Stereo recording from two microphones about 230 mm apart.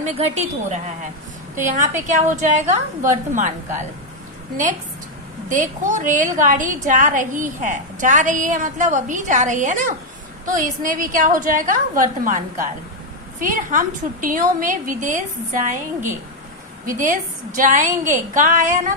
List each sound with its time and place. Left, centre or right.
0.0 s a woman's voice: right
2.0 s a woman's voice: right
5.5 s a woman's voice: right